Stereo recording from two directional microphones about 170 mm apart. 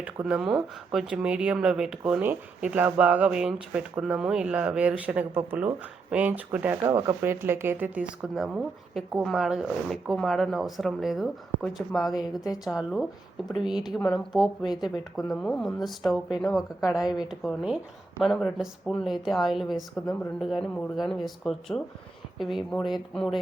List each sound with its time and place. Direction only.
0.0 s speech: 5° right (ahead or behind)
14.6 s speech: 25° left (ahead or behind)
15.3 s speech: centre (ahead or behind)